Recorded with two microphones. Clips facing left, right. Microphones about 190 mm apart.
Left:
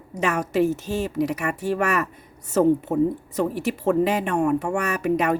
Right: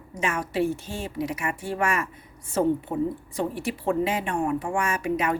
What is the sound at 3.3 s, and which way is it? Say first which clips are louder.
Speech: left 4 dB; 40° left (ahead or behind).